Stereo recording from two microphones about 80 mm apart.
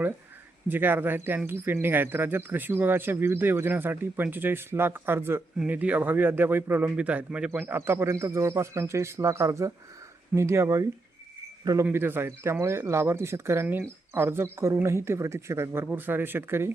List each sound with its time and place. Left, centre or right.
0.7 s speech: right
7.5 s speech: right
11.6 s speech: right
11.9 s speech: right